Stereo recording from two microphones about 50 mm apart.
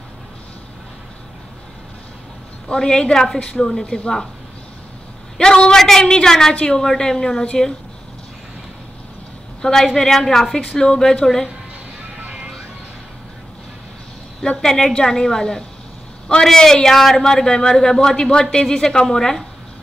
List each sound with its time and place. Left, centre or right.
2.7 s speech: centre
5.4 s speech: centre
9.6 s a woman's voice: centre
12.2 s music: right
14.4 s speech: centre